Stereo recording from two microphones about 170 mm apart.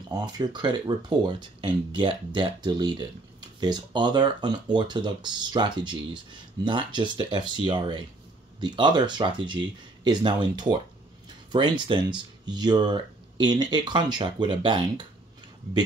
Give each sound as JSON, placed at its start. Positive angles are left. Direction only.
{"t": 0.1, "sound": "speech", "side_deg": -25}